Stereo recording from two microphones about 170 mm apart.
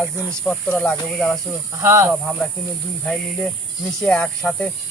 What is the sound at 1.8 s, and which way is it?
Speech, 15° right (ahead or behind).